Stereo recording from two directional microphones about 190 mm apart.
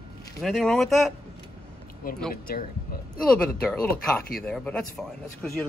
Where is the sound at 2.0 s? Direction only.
50° left (ahead or behind).